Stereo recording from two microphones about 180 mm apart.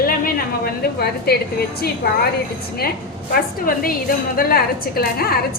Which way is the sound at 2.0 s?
60° left (ahead or behind).